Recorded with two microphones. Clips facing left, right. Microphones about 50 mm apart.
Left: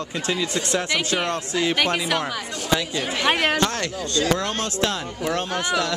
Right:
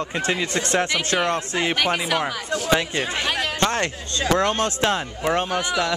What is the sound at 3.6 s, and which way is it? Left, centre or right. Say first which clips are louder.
Speech: right 2 dB; right.